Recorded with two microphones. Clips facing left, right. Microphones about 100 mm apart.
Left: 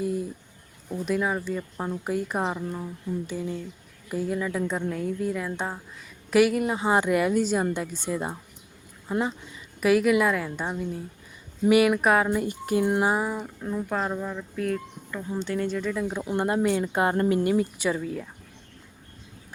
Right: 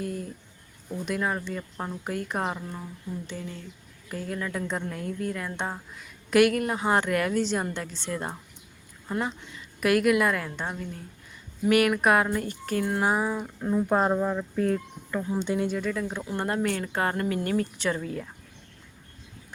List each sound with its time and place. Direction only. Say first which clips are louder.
0.0 s a sound: left 5 dB; 5° left (ahead or behind)
1.0 s speech: left 3 dB; 5° left (ahead or behind)
9.8 s speech: left 2 dB; centre (ahead or behind)
12.3 s speech: left 4 dB; 10° left (ahead or behind)
13.1 s speech: even; 5° left (ahead or behind)
13.6 s speech: right 7 dB; 15° right (ahead or behind)
13.9 s speech: right 6 dB; 30° right (ahead or behind)
15.3 s speech: even; 15° right (ahead or behind)
15.8 s speech: left 2 dB; 5° left (ahead or behind)
16.2 s speech: left 4 dB; 20° left (ahead or behind)
17.4 s speech: left 3 dB; 10° left (ahead or behind)